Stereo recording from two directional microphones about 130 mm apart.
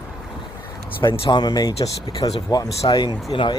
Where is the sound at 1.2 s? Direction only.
35° left (ahead or behind).